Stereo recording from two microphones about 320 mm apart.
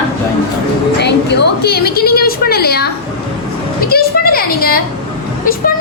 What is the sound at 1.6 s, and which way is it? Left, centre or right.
A woman's voice, left.